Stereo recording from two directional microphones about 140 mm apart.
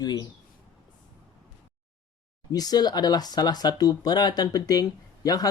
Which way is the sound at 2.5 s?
30° left (ahead or behind).